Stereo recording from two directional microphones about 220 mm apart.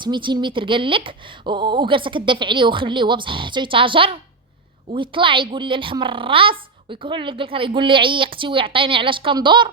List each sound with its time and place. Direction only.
0.0 s a woman's voice: 20° right (ahead or behind)